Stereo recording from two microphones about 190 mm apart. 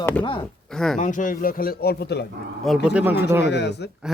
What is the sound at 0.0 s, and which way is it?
Chopping, 5° left (ahead or behind).